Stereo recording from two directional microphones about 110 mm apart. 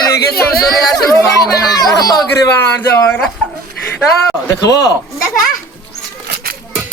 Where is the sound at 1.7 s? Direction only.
35° left (ahead or behind).